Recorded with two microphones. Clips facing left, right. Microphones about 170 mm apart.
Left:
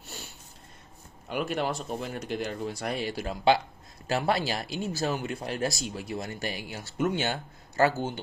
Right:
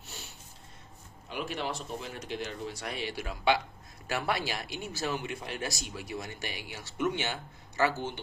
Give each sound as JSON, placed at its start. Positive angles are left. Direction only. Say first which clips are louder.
{"t": 1.3, "sound": "speech", "louder": "left 6 dB", "side_deg": 50}